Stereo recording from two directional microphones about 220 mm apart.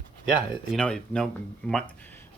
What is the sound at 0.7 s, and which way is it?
Speech, 5° left (ahead or behind).